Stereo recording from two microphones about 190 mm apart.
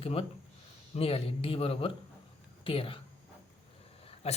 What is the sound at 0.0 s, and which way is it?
Speech, 30° left (ahead or behind).